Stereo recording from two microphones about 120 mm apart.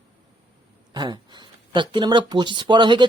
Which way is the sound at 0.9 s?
40° right (ahead or behind).